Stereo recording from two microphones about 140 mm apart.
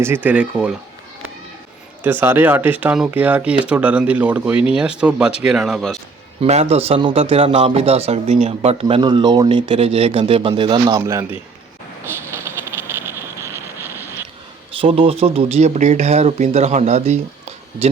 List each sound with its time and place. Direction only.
0.0 s speech: 15° right (ahead or behind)
2.0 s speech: 15° right (ahead or behind)
6.4 s speech: 50° right (ahead or behind)
9.0 s speech: 30° right (ahead or behind)
11.0 s a man's voice: 20° right (ahead or behind)
12.2 s a sound: 20° right (ahead or behind)
14.8 s speech: 40° right (ahead or behind)